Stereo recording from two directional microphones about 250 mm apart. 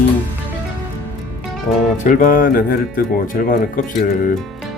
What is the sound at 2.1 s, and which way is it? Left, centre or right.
Speech, left.